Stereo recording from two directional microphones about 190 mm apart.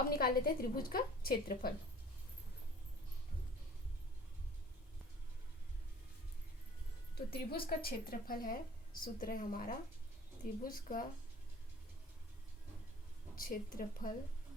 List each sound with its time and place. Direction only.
0.2 s a woman's voice: 50° left (ahead or behind)
7.2 s a woman's voice: 55° left (ahead or behind)
13.3 s a woman's voice: 50° left (ahead or behind)